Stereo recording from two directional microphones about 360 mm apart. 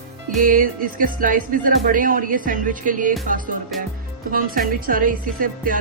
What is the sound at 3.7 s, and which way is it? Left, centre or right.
Music, centre.